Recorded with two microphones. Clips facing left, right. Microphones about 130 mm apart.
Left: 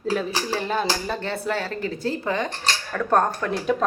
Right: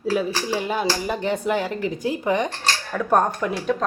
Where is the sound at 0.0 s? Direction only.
10° right (ahead or behind).